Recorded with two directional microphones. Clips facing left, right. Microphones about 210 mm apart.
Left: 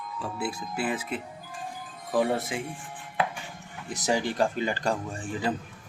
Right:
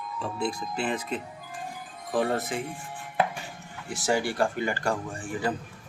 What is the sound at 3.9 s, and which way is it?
Speech, 20° left (ahead or behind).